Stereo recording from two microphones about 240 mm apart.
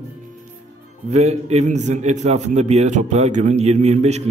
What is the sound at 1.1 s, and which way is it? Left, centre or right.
A man's voice, right.